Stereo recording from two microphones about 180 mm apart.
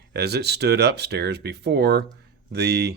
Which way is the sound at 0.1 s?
65° right (ahead or behind).